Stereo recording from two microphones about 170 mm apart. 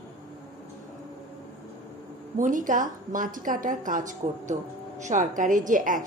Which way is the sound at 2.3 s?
50° right (ahead or behind).